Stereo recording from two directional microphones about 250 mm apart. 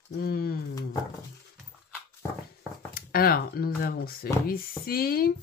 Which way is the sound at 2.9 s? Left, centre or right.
Left.